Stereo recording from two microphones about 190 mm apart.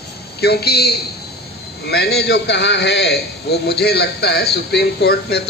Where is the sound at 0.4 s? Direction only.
60° left (ahead or behind).